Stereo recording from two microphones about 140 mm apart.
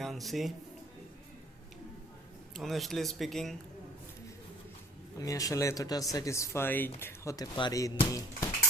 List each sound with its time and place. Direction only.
0.0 s speech: centre (ahead or behind)
2.6 s speech: centre (ahead or behind)
5.2 s speech: 25° left (ahead or behind)